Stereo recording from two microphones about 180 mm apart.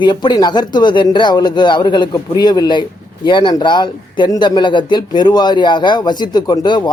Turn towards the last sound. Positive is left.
turn(degrees=25)  # may be behind; listen again after turning